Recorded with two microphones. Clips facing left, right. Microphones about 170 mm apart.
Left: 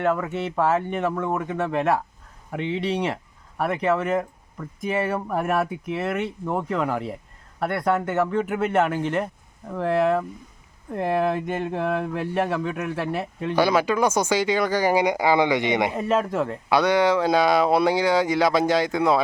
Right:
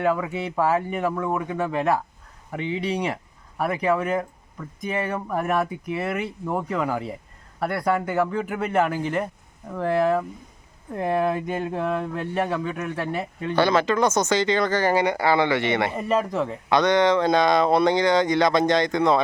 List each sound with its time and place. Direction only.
0.0 s speech: centre (ahead or behind); by 16.0 s 15° left (ahead or behind)
16.0 s speech: centre (ahead or behind)